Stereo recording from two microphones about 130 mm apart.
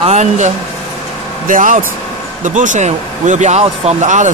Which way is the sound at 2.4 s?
75° right (ahead or behind).